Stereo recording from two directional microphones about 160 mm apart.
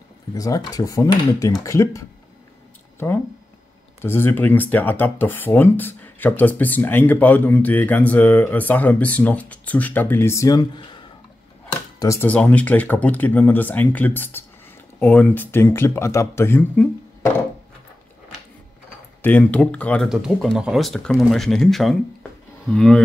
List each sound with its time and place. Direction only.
0.3 s speech: 20° left (ahead or behind)
4.0 s speech: 15° left (ahead or behind)
12.0 s speech: 15° left (ahead or behind)
19.2 s speech: 10° left (ahead or behind)
20.1 s speech: 5° right (ahead or behind)